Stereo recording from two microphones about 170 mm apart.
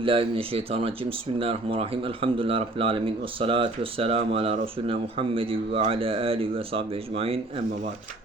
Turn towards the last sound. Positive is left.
turn(degrees=-35)  # may be behind; listen again after turning